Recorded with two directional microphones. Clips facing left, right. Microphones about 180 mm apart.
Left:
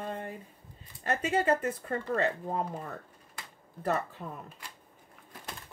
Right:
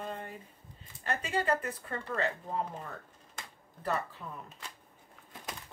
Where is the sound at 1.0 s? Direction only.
45° left (ahead or behind).